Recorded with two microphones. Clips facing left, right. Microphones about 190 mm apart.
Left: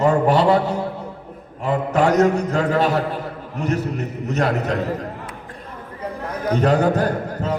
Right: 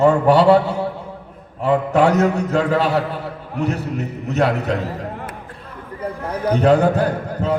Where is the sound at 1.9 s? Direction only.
40° left (ahead or behind).